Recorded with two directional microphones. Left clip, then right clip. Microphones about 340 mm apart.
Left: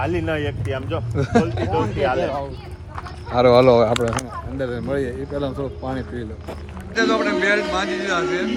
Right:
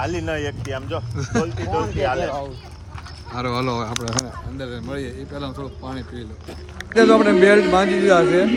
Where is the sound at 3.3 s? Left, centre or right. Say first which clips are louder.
Left 11 dB; centre.